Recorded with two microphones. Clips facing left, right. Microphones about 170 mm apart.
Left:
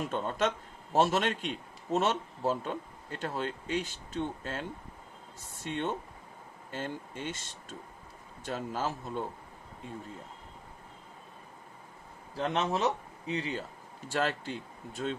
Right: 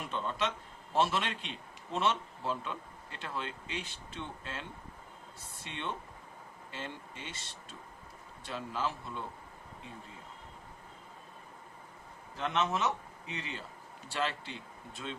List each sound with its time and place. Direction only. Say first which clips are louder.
0.0 s a man's voice: left 5 dB; 45° left (ahead or behind)
5.6 s a man's voice: left 7 dB; 45° left (ahead or behind)
12.4 s speech: left 3 dB; 35° left (ahead or behind)
14.1 s a man's voice: left 4 dB; 45° left (ahead or behind)